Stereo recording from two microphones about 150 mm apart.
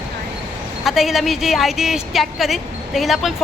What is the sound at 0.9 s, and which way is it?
A woman's voice, centre (ahead or behind).